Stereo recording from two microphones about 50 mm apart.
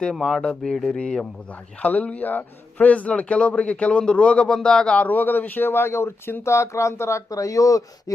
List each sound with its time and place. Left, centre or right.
0.0 s speech: centre
0.9 s speech: left
5.0 s speech: left
6.4 s speech: left